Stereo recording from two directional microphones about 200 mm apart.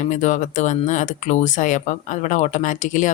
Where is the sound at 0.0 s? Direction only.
35° left (ahead or behind).